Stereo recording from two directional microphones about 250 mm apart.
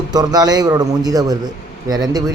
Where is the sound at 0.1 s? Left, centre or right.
Centre.